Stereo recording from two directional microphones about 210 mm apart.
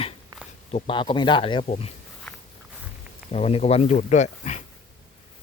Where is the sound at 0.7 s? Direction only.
25° left (ahead or behind).